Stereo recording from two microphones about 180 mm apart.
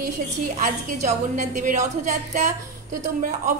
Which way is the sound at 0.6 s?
45° right (ahead or behind).